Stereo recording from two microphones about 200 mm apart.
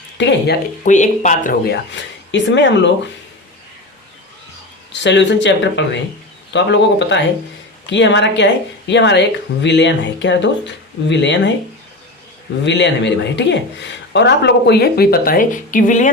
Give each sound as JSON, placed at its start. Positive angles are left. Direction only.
{"t": 0.2, "sound": "speech", "side_deg": 60}
{"t": 0.9, "sound": "speech", "side_deg": 40}
{"t": 2.3, "sound": "speech", "side_deg": 65}
{"t": 4.9, "sound": "speech", "side_deg": 60}
{"t": 12.6, "sound": "a woman's voice", "side_deg": 65}